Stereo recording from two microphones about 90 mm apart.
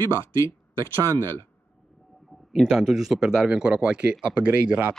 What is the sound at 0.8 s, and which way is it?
Speech, 30° right (ahead or behind).